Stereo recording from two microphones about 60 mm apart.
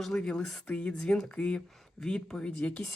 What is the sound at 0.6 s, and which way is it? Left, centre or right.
Speech, left.